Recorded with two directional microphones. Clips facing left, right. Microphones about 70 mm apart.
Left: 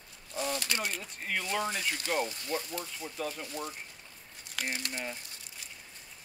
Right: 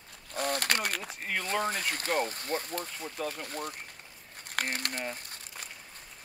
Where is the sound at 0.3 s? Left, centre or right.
Right.